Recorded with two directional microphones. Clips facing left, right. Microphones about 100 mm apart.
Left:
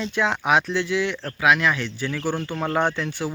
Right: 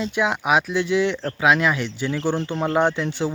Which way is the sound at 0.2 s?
15° right (ahead or behind).